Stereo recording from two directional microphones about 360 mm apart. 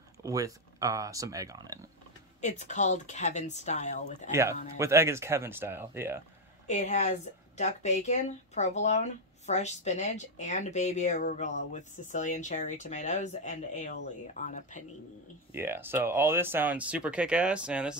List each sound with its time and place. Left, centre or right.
0.2 s speech: centre
2.4 s speech: centre
4.3 s speech: centre
6.7 s speech: centre
15.5 s speech: centre